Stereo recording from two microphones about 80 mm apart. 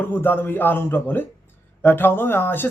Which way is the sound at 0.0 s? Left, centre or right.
Left.